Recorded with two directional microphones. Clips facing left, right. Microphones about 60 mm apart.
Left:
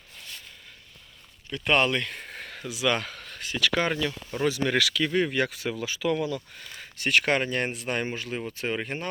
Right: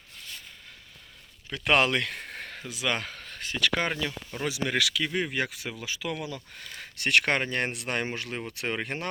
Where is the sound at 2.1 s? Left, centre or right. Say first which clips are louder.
Even; right.